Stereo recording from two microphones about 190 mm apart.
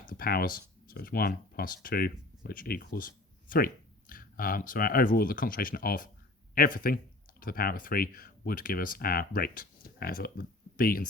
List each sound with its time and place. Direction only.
0.1 s speech: 50° left (ahead or behind)